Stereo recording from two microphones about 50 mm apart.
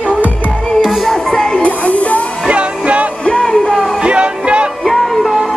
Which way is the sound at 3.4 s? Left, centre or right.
Centre.